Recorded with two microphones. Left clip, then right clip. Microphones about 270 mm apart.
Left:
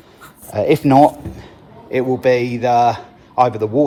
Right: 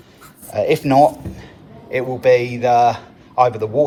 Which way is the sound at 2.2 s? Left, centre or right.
Left.